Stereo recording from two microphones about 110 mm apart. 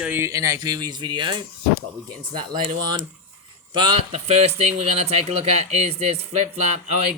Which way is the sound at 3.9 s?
80° right.